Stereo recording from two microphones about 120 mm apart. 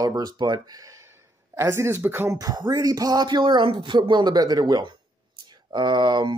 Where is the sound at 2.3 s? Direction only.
30° right (ahead or behind).